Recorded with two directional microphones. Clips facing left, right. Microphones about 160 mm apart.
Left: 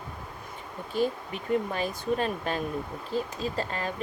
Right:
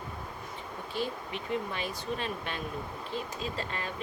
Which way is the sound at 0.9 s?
45° left (ahead or behind).